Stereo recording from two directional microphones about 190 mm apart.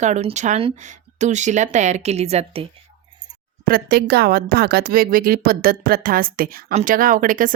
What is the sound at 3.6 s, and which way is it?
A woman's voice, 50° right (ahead or behind).